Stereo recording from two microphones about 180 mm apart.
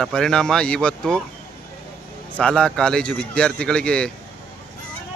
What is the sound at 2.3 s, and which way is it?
Speech, 5° left (ahead or behind).